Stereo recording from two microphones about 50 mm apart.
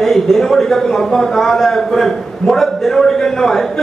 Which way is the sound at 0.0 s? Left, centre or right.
Centre.